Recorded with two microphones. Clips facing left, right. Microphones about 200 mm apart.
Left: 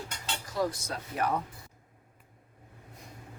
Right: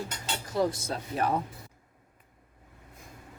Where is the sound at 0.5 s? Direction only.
25° right (ahead or behind).